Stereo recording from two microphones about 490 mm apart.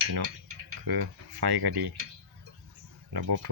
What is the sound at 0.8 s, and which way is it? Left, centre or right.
Cutlery, right.